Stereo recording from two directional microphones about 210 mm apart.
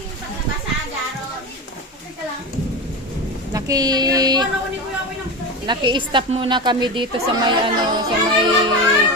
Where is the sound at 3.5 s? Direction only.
15° right (ahead or behind).